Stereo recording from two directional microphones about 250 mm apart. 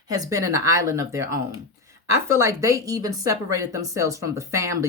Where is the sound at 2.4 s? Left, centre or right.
Centre.